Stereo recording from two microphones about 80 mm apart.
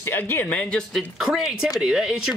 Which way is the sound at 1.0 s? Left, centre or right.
Centre.